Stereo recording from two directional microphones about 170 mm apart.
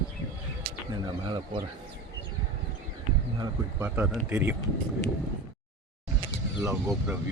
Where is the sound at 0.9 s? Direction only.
25° right (ahead or behind).